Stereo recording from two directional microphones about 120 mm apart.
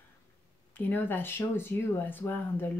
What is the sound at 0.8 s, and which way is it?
A woman's voice, 15° left (ahead or behind).